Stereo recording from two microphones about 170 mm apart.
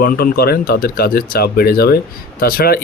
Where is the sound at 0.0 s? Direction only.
60° left (ahead or behind).